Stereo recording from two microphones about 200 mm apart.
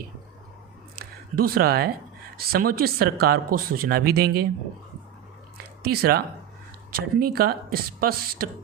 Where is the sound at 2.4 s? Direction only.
50° right (ahead or behind).